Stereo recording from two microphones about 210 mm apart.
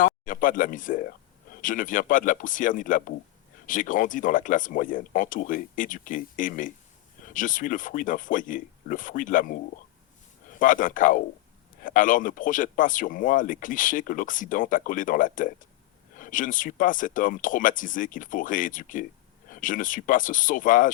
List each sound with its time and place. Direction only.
0.0 s speech: 40° left (ahead or behind)
10.6 s speech: 40° left (ahead or behind)